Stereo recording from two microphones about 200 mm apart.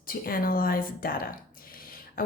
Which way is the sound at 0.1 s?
45° left (ahead or behind).